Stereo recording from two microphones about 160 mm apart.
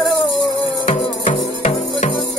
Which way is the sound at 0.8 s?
40° left (ahead or behind).